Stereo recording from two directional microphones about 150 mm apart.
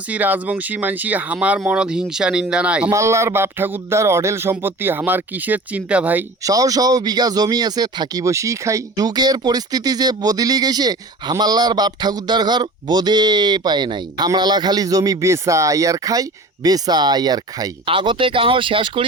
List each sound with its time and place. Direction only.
0.1 s speech: 10° right (ahead or behind)
2.9 s speech: 20° right (ahead or behind)
6.4 s speech: 25° right (ahead or behind)